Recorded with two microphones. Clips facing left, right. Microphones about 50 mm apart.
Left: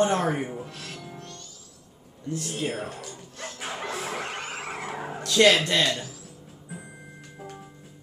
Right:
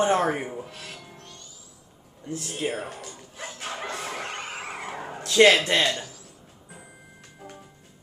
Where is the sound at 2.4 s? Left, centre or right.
Centre.